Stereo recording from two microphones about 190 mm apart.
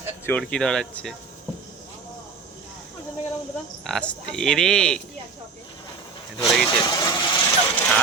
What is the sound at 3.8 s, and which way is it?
Speech, centre (ahead or behind).